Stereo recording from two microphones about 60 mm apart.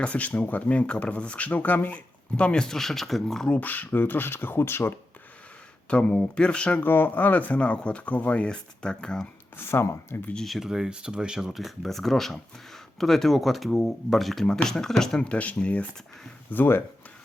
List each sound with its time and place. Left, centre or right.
0.0 s speech: left
2.3 s speech: centre
3.5 s speech: left
5.9 s speech: centre
9.6 s speech: left
10.4 s speech: centre
15.3 s speech: left
16.5 s speech: left